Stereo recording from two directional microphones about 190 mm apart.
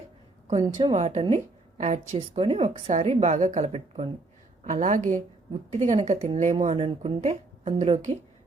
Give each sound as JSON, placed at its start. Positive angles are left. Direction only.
{"t": 0.4, "sound": "a woman's voice", "side_deg": -30}